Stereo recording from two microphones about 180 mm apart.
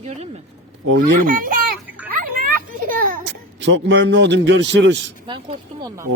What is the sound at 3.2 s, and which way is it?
A man's voice, 85° right.